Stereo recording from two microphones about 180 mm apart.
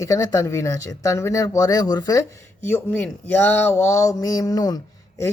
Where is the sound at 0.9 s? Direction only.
15° left (ahead or behind).